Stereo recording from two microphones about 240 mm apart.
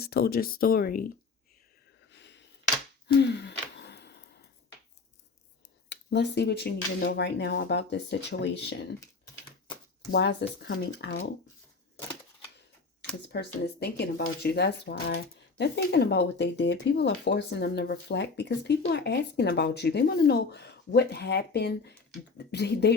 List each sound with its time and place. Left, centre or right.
0.0 s speech: left
2.1 s a sound: left
3.1 s gasp: left
5.9 s speech: left
10.1 s speech: left
13.2 s speech: left